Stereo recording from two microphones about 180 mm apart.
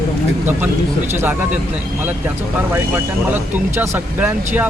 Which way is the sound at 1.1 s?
10° right (ahead or behind).